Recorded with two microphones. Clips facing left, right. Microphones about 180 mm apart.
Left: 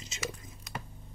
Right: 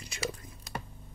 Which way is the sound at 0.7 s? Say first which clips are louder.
Right 2 dB; 30° right (ahead or behind).